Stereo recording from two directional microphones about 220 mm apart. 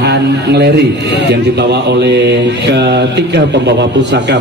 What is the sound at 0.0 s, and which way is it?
A man's voice, 50° right (ahead or behind).